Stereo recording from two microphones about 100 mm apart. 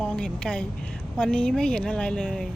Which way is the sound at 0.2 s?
10° left (ahead or behind).